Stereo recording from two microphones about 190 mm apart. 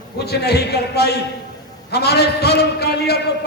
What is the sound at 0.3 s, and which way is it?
A man's voice, 60° left (ahead or behind).